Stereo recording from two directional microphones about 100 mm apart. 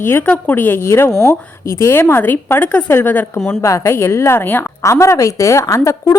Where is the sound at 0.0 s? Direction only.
25° left (ahead or behind).